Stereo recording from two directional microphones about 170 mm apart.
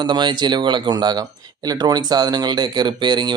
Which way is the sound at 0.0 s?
25° right (ahead or behind).